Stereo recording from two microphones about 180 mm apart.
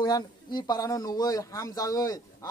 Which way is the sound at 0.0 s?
20° left (ahead or behind).